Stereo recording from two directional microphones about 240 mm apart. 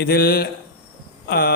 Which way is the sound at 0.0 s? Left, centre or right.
Left.